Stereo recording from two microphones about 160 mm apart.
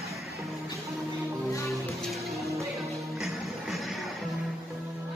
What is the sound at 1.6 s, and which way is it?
Music, centre (ahead or behind).